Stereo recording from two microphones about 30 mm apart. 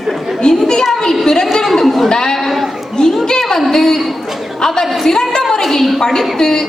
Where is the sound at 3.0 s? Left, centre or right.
Left.